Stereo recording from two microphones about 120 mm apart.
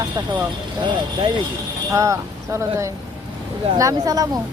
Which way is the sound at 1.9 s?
25° right (ahead or behind).